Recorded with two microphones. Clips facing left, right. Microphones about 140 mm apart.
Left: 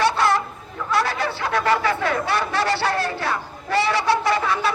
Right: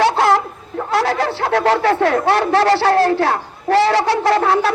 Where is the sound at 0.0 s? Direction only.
90° right.